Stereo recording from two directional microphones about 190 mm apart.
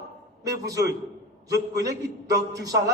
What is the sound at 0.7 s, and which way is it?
A man's voice, 15° right (ahead or behind).